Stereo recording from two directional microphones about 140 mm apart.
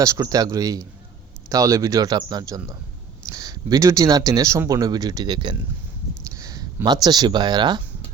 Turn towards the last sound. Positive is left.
turn(degrees=-30)  # may be behind; listen again after turning